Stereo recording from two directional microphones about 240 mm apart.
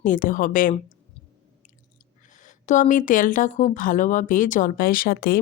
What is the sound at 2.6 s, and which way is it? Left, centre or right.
A woman's voice, left.